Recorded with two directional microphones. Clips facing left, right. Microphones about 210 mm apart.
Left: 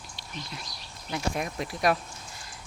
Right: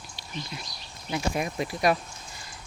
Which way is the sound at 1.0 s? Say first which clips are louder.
Right 2 dB; 5° right (ahead or behind).